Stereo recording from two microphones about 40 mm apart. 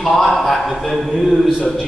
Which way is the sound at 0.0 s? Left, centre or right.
Centre.